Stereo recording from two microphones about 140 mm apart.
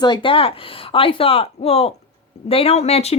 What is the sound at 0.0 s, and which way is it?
Speech, 35° left (ahead or behind).